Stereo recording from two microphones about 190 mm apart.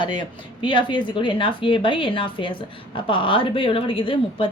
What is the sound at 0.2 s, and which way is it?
Speech, 25° left (ahead or behind).